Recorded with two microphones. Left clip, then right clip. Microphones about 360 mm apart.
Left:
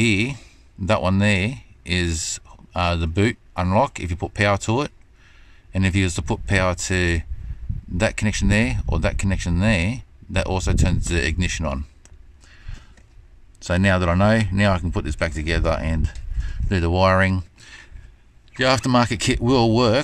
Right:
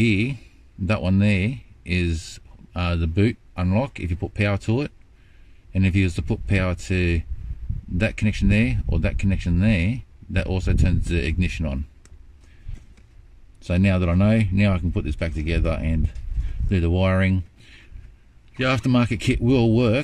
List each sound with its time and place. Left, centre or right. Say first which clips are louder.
0.0 s speech: left 2 dB; centre
13.6 s speech: left 4 dB; centre
17.6 s a sound: left 6 dB; centre
18.6 s speech: left 4 dB; centre